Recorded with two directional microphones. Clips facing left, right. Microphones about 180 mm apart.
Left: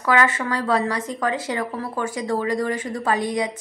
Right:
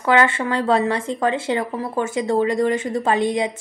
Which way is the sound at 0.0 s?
25° right (ahead or behind).